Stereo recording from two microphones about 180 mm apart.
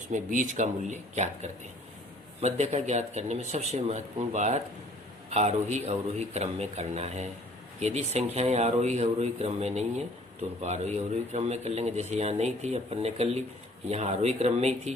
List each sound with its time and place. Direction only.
0.1 s a man's voice: 45° right (ahead or behind)